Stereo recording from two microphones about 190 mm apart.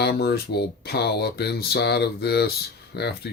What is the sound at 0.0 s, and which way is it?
Speech, 60° left (ahead or behind).